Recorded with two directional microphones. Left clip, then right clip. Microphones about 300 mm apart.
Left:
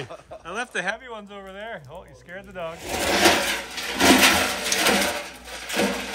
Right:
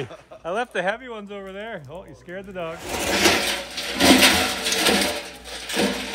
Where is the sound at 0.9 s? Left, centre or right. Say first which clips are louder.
Right 3 dB; left.